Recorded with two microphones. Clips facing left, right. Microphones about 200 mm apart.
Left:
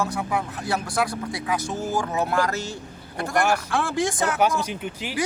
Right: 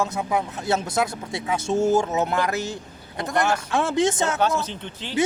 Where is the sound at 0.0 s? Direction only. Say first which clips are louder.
Right 2 dB; 20° right (ahead or behind).